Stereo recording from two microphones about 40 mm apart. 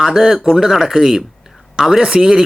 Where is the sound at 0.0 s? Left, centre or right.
Centre.